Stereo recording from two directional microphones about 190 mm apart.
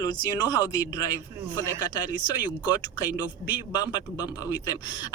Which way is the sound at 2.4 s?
20° left (ahead or behind).